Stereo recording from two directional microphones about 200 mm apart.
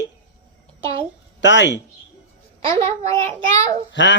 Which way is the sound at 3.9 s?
65° left (ahead or behind).